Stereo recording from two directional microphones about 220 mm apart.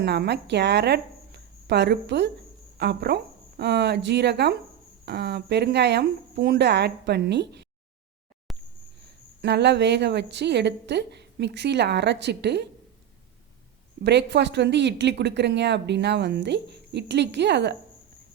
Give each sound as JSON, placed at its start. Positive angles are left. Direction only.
{"t": 0.0, "sound": "a woman's voice", "side_deg": -50}
{"t": 8.5, "sound": "a sound", "side_deg": 0}
{"t": 9.4, "sound": "a woman's voice", "side_deg": -50}
{"t": 14.0, "sound": "a woman's voice", "side_deg": -50}